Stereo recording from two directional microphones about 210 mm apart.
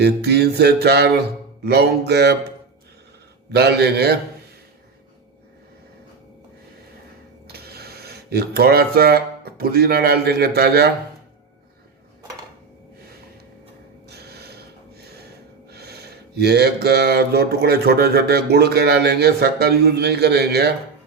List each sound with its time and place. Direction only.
0.0 s mantra: 50° right (ahead or behind)
3.5 s mantra: 50° right (ahead or behind)
7.4 s speech: 50° right (ahead or behind)
14.1 s snort: 50° right (ahead or behind)
15.7 s mantra: 50° right (ahead or behind)